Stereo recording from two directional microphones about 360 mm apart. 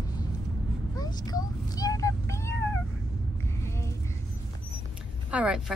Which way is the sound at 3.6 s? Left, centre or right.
Centre.